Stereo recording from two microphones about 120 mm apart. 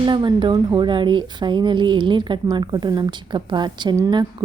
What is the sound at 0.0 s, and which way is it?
Speech, 40° right (ahead or behind).